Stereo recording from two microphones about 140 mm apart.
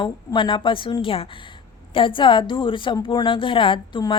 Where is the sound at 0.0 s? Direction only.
35° left (ahead or behind).